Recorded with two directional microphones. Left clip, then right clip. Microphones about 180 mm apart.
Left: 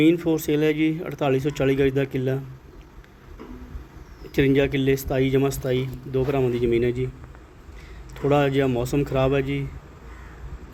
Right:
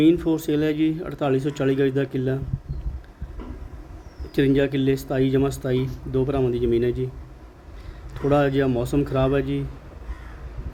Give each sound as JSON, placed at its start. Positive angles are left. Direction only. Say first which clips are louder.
{"t": 0.0, "sound": "speech", "louder": "right 1 dB", "side_deg": -5}
{"t": 4.4, "sound": "speech", "louder": "even", "side_deg": -5}
{"t": 5.6, "sound": "speech", "louder": "even", "side_deg": -20}
{"t": 6.2, "sound": "speech", "louder": "left 1 dB", "side_deg": -5}
{"t": 8.1, "sound": "speech", "louder": "even", "side_deg": -5}